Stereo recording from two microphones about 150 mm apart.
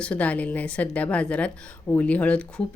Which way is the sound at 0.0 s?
10° left (ahead or behind).